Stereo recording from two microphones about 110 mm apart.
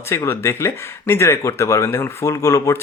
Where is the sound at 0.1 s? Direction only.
25° left (ahead or behind).